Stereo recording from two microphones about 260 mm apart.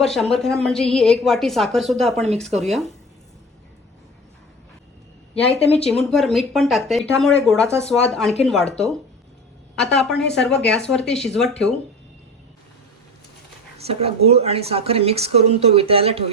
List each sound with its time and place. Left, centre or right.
0.0 s a woman's voice: centre
5.5 s speech: left
5.9 s a woman's voice: centre
13.7 s speech: right